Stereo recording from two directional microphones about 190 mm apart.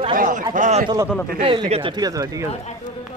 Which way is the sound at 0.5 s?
40° right (ahead or behind).